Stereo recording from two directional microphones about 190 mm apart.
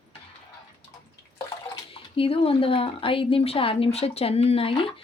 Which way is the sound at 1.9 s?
30° left (ahead or behind).